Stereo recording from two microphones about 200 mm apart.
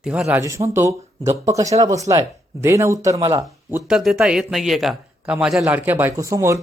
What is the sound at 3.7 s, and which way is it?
A man's voice, 5° right (ahead or behind).